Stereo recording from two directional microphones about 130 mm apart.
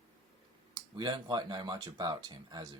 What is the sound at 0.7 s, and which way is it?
Speech, 35° right (ahead or behind).